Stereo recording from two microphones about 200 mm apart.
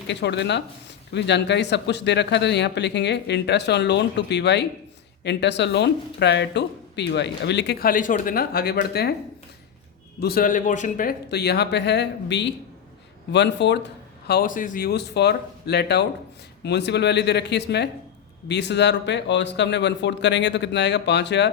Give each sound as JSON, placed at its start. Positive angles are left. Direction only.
{"t": 0.1, "sound": "speech", "side_deg": 60}
{"t": 10.2, "sound": "speech", "side_deg": 50}